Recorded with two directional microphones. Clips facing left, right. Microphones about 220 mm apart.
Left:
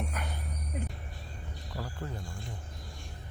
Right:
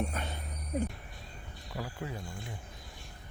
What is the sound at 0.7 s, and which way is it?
Music, 40° right (ahead or behind).